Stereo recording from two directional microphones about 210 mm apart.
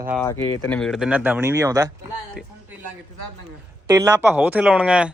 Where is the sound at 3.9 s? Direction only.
15° right (ahead or behind).